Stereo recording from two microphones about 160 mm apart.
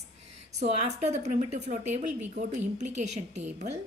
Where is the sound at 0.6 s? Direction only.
45° right (ahead or behind).